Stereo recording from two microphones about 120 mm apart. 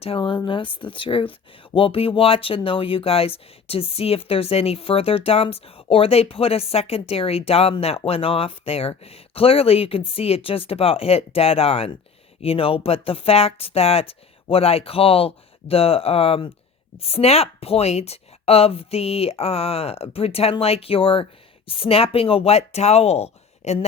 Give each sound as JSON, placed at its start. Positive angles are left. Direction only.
{"t": 0.0, "sound": "speech", "side_deg": 50}